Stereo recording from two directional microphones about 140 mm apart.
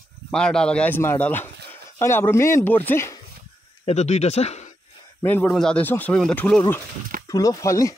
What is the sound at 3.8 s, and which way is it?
Speech, 50° left (ahead or behind).